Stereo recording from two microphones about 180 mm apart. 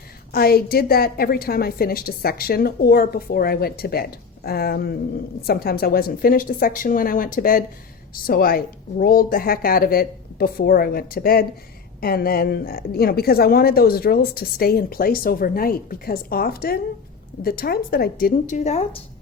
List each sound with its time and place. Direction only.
0.3 s a woman's voice: 60° left (ahead or behind); by 19.0 s 35° left (ahead or behind)